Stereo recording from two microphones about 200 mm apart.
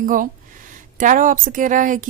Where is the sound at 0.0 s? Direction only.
40° right (ahead or behind).